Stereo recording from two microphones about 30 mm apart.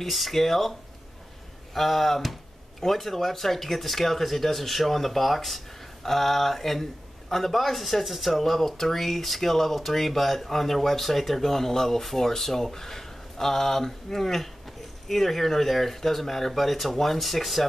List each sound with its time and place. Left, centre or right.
0.0 s speech: centre